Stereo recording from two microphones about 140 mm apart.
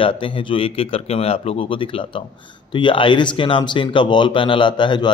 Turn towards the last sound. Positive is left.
turn(degrees=35)  # may be behind; listen again after turning